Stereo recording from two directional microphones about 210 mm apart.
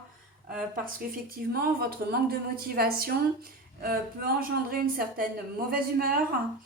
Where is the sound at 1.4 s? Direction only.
45° right (ahead or behind).